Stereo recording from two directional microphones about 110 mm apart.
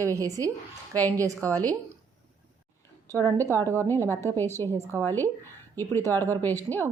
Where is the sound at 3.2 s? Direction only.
20° left (ahead or behind).